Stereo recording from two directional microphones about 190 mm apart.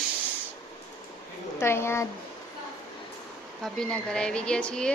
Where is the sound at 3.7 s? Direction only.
5° left (ahead or behind).